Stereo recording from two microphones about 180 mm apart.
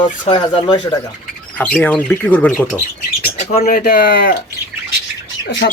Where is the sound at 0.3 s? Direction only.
25° left (ahead or behind).